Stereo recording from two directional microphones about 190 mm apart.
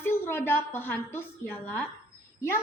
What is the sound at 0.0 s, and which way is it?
A woman's voice, 10° left (ahead or behind).